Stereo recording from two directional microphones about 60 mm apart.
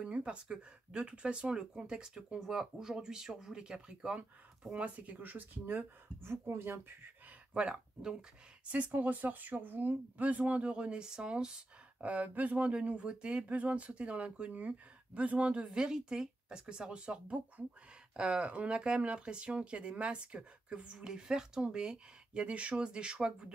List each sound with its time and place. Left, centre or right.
0.0 s speech: centre; by 6.9 s right
7.5 s speech: centre
8.7 s speech: right